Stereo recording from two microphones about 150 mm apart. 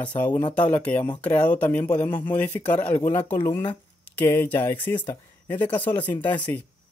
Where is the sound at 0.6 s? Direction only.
10° left (ahead or behind).